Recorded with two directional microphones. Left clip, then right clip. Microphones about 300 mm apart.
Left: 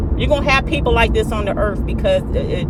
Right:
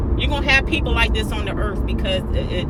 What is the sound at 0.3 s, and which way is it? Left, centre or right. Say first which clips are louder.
Speech: left 3 dB; centre.